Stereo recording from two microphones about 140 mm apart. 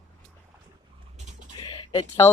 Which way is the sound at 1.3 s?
60° right (ahead or behind).